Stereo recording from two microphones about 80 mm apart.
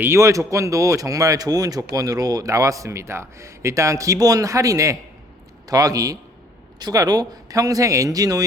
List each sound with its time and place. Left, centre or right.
0.0 s speech: right